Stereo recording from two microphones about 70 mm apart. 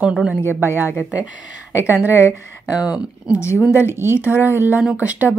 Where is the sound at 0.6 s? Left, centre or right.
Right.